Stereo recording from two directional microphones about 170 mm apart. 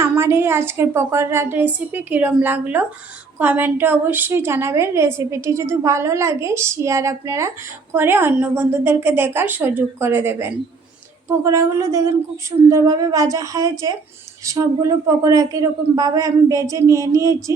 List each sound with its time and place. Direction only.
0.0 s a woman's voice: 15° right (ahead or behind)